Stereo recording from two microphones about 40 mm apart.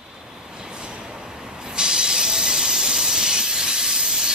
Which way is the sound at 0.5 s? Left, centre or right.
Right.